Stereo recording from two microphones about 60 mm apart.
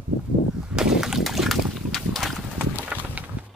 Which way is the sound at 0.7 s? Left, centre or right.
Centre.